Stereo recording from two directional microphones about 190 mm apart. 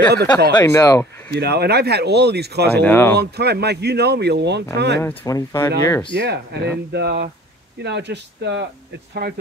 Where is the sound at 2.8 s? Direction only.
10° left (ahead or behind).